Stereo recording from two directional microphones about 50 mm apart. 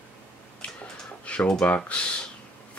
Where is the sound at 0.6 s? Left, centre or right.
Left.